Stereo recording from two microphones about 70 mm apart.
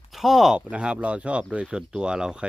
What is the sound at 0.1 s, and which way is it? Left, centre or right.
Speech, centre.